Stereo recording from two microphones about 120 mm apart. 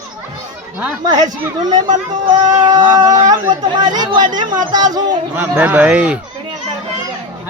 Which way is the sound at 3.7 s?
35° right (ahead or behind).